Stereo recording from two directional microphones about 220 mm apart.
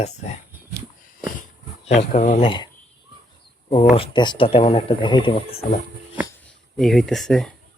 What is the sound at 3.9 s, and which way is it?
Speech, 20° left (ahead or behind).